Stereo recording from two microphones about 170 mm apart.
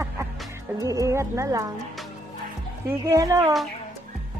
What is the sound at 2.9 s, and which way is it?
Speech, 20° right (ahead or behind).